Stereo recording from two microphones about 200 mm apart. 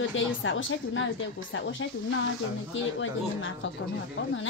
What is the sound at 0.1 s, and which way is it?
A woman's voice, 75° left (ahead or behind).